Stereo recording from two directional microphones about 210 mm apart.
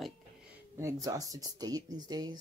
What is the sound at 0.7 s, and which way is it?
Speech, 15° right (ahead or behind).